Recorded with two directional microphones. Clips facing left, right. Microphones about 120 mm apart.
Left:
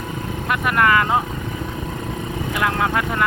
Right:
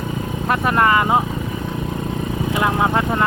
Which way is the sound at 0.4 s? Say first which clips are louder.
Right 2 dB; 35° right (ahead or behind).